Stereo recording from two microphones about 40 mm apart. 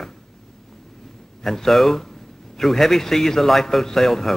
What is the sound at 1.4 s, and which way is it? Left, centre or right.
A man's voice, centre.